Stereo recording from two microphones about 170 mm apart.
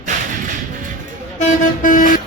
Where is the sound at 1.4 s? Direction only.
50° left (ahead or behind).